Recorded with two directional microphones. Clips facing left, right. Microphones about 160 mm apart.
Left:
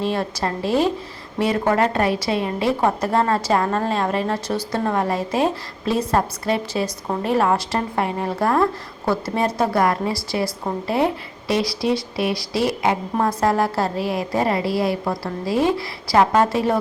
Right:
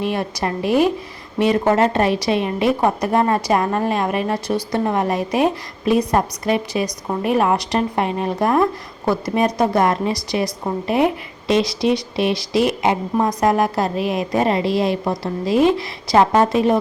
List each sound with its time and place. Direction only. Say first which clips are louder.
0.0 s a woman's voice: right 1 dB; 15° right (ahead or behind)